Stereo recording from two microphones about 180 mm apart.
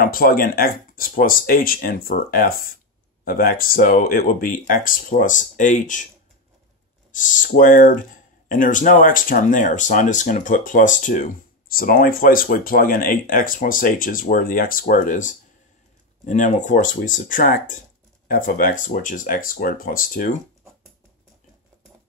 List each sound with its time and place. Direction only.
0.0 s speech: 55° left (ahead or behind)
7.1 s speech: 45° left (ahead or behind)